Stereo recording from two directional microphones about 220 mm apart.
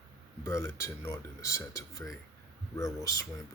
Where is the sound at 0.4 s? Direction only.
15° left (ahead or behind).